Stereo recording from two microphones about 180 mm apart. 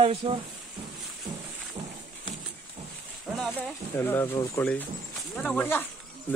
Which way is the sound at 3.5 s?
10° left (ahead or behind).